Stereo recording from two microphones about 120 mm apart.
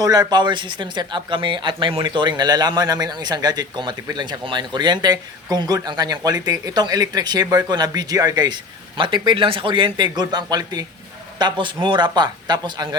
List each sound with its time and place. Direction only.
0.0 s speech: 30° right (ahead or behind)